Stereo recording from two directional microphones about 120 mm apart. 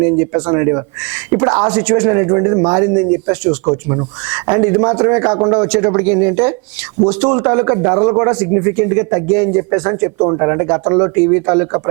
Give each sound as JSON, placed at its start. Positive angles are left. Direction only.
{"t": 0.0, "sound": "speech", "side_deg": -25}
{"t": 5.6, "sound": "a man's voice", "side_deg": -15}